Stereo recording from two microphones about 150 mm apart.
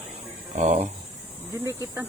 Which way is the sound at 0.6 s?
50° right (ahead or behind).